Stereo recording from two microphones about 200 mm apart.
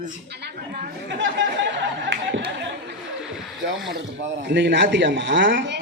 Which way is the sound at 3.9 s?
60° right (ahead or behind).